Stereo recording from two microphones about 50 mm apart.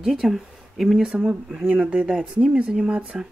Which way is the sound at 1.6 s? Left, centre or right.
Right.